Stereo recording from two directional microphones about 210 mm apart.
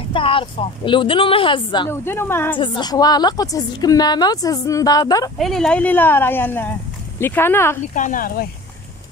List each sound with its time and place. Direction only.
0.1 s a woman's voice: 25° left (ahead or behind)
2.0 s speech: 10° left (ahead or behind)
2.6 s a woman's voice: 20° left (ahead or behind)
5.4 s speech: centre (ahead or behind)
7.9 s speech: 40° left (ahead or behind)